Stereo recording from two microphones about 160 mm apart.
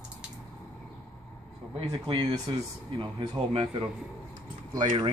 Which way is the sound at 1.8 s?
30° right (ahead or behind).